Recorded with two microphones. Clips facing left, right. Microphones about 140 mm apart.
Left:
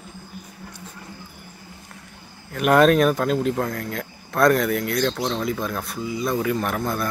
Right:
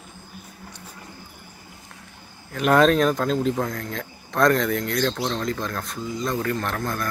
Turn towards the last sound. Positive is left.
turn(degrees=10)  # may be behind; listen again after turning